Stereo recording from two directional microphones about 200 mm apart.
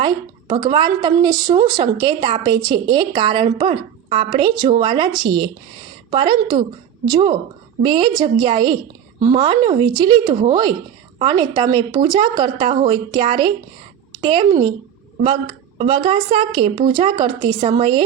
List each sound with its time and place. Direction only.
0.0 s a woman's voice: 25° right (ahead or behind)
15.8 s a woman's voice: 25° right (ahead or behind)